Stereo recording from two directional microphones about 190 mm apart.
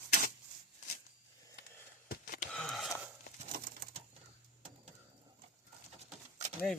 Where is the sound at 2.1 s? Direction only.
50° left (ahead or behind).